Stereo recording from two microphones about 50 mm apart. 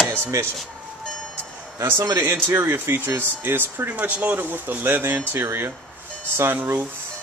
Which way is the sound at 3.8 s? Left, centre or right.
Right.